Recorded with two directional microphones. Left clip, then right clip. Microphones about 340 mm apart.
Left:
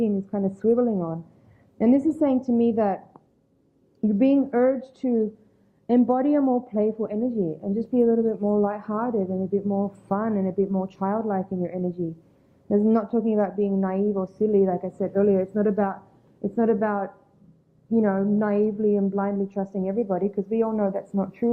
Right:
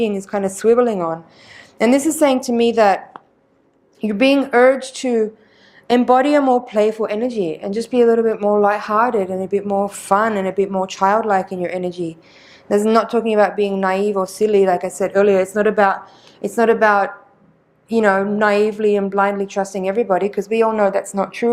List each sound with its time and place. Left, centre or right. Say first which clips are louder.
0.0 s a woman's voice: right 7 dB; centre
7.3 s speech: right 6 dB; right
7.9 s a woman's voice: right 8 dB; centre